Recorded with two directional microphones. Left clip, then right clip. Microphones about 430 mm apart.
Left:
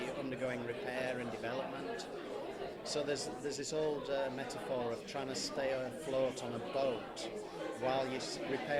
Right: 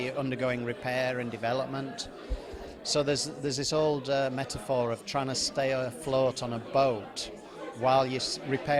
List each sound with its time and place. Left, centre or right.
0.0 s a man's voice: right
2.8 s a man's voice: right